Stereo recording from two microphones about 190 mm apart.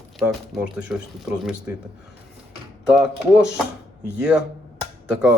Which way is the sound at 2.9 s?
5° right (ahead or behind).